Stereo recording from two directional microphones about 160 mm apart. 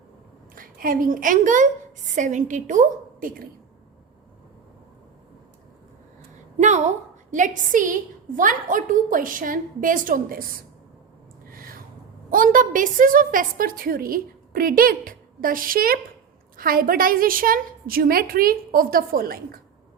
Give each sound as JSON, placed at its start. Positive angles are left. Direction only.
{"t": 0.5, "sound": "a woman's voice", "side_deg": -60}
{"t": 6.6, "sound": "a woman's voice", "side_deg": -45}
{"t": 11.5, "sound": "a sound", "side_deg": -65}
{"t": 12.3, "sound": "a woman's voice", "side_deg": -60}